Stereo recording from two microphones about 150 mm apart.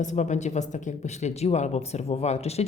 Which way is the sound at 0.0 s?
50° left (ahead or behind).